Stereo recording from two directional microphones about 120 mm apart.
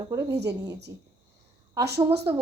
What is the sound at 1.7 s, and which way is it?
Speech, 25° right (ahead or behind).